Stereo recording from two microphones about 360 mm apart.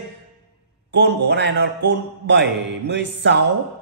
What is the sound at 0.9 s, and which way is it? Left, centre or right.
A man's voice, right.